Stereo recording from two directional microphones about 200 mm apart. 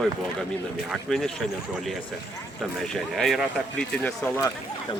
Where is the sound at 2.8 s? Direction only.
Centre (ahead or behind).